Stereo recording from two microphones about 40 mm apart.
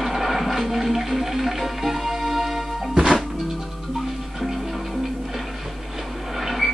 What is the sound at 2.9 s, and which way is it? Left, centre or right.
Music, centre.